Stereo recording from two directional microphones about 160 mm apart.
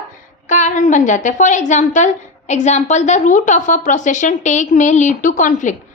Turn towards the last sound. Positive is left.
turn(degrees=50)  # may be behind; listen again after turning